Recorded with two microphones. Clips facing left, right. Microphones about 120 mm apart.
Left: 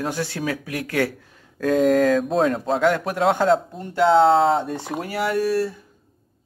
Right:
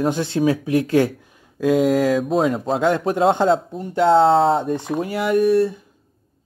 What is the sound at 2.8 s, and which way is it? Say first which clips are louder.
Speech: right 3 dB; 25° right (ahead or behind).